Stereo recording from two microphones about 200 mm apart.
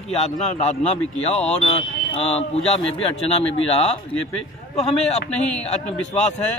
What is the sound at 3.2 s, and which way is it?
Speech, 30° left (ahead or behind).